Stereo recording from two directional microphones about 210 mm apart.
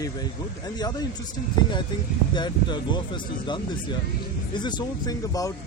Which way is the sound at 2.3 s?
20° left (ahead or behind).